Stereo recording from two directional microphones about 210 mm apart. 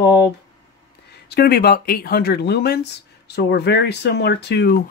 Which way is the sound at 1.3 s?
50° left (ahead or behind).